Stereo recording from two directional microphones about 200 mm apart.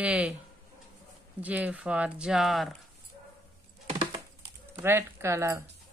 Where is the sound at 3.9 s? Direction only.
20° right (ahead or behind).